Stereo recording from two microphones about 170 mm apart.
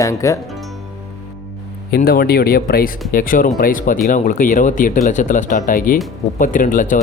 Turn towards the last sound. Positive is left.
turn(degrees=50)  # may be behind; listen again after turning